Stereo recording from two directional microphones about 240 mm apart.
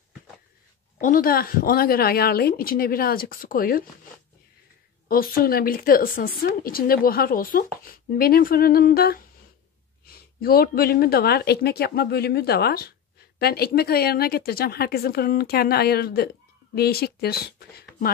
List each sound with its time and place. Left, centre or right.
1.0 s a woman's voice: left
5.0 s a woman's voice: left
10.4 s a woman's voice: left